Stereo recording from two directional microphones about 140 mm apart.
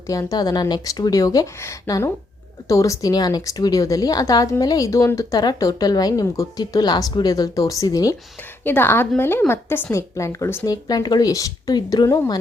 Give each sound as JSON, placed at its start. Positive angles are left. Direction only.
{"t": 0.1, "sound": "a woman's voice", "side_deg": 25}
{"t": 8.6, "sound": "a woman's voice", "side_deg": 15}